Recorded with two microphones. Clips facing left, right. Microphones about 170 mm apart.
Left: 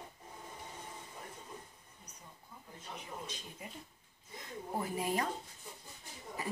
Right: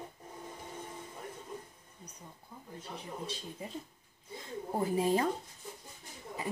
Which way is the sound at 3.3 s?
30° right (ahead or behind).